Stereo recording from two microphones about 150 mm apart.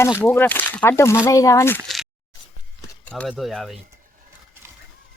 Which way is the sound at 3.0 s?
5° left (ahead or behind).